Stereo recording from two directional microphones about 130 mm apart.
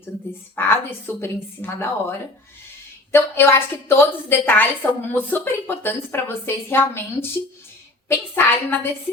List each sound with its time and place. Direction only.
0.5 s a woman's voice: 15° left (ahead or behind)